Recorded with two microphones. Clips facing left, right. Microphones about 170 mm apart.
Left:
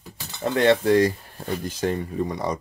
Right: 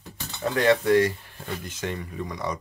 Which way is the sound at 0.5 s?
30° left (ahead or behind).